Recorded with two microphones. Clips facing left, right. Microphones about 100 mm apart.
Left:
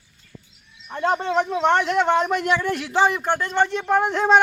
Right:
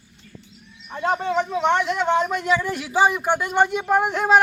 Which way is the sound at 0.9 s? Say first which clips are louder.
Left 1 dB; 5° right (ahead or behind).